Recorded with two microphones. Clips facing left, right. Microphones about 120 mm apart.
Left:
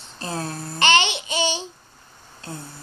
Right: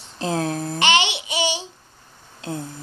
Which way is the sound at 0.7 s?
15° right (ahead or behind).